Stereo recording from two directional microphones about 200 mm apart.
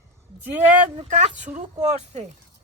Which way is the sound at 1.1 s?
35° right (ahead or behind).